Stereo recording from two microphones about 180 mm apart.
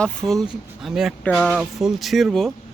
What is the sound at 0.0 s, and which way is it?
Speech, 5° left (ahead or behind).